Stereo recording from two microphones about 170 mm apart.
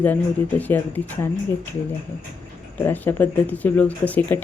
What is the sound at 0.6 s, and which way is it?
Speech, 10° left (ahead or behind).